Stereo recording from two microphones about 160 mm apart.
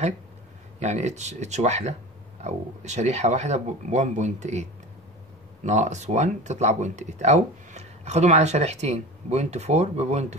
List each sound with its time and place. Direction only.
0.7 s speech: 45° right (ahead or behind)
5.7 s speech: 45° right (ahead or behind)